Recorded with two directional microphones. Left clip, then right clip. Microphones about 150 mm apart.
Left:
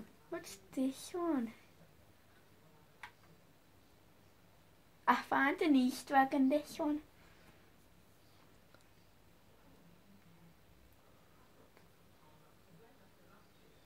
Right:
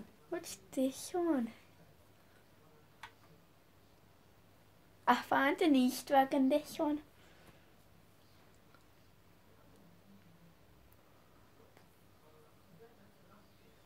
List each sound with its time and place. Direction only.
0.3 s speech: 70° right (ahead or behind)
5.0 s speech: 65° right (ahead or behind)